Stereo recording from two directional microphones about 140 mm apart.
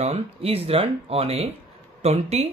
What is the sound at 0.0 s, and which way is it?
Speech, 45° right (ahead or behind).